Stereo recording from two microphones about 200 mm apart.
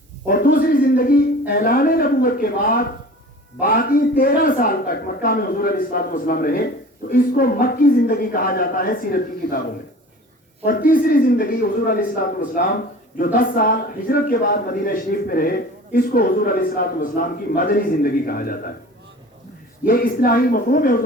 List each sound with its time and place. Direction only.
0.3 s a man's voice: 45° left (ahead or behind)
10.7 s a man's voice: 45° left (ahead or behind)
19.8 s a man's voice: 45° left (ahead or behind)